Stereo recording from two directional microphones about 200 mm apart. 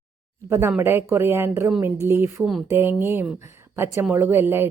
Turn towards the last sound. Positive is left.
turn(degrees=-10)  # may be behind; listen again after turning